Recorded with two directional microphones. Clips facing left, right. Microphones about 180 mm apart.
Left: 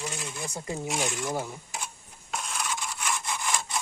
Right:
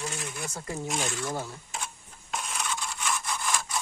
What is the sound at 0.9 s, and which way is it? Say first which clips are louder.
Speech: left 1 dB; 15° left (ahead or behind).